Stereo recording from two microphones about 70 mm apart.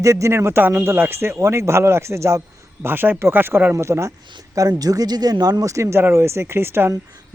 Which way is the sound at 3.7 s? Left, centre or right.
Right.